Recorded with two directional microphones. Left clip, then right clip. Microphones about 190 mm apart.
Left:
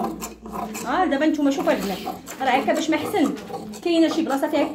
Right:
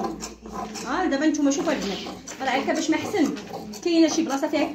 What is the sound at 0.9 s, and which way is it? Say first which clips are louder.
A woman's voice: left 3 dB; 15° left (ahead or behind).